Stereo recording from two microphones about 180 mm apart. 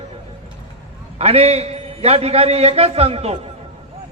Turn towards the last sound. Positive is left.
turn(degrees=-35)  # may be behind; listen again after turning